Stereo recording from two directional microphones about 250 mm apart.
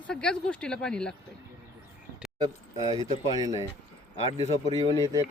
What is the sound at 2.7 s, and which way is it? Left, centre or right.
Speech, centre.